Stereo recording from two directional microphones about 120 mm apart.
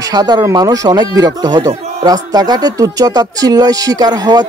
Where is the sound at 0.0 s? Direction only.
35° right (ahead or behind).